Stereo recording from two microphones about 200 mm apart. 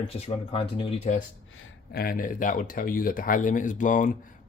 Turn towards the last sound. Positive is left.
turn(degrees=40)  # may be behind; listen again after turning